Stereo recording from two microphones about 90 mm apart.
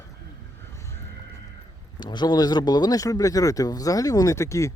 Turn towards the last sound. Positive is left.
turn(degrees=35)  # may be behind; listen again after turning